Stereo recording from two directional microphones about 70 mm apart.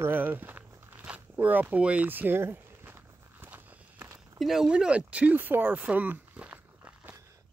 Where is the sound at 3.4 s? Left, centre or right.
Right.